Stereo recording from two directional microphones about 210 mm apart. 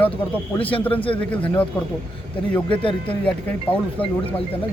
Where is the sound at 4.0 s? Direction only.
5° left (ahead or behind).